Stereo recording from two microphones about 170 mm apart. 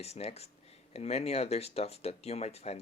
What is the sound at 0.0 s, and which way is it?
Speech, 40° left (ahead or behind).